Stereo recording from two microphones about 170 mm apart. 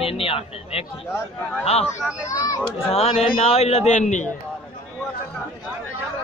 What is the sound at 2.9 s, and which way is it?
Speech, 35° left (ahead or behind).